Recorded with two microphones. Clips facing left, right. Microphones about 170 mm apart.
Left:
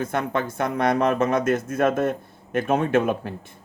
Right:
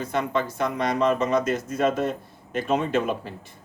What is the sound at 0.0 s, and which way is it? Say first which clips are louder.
Speech: left 1 dB; 50° left (ahead or behind).